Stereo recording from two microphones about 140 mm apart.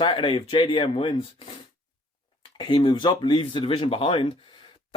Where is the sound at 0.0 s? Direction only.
35° left (ahead or behind).